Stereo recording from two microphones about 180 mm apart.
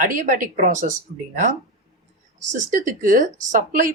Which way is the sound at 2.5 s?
45° right (ahead or behind).